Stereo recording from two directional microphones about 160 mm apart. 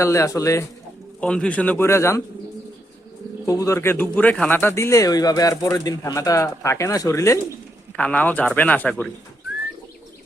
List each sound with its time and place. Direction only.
0.0 s speech: 20° left (ahead or behind)
1.2 s speech: 5° left (ahead or behind)
3.4 s speech: 20° left (ahead or behind)
7.9 s speech: 10° left (ahead or behind)